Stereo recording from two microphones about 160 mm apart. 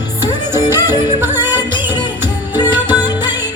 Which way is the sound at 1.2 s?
10° right (ahead or behind).